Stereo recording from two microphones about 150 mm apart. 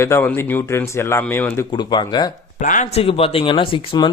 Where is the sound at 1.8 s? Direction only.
30° left (ahead or behind).